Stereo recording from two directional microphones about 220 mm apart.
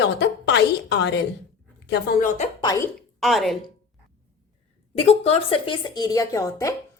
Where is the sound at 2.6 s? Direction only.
15° left (ahead or behind).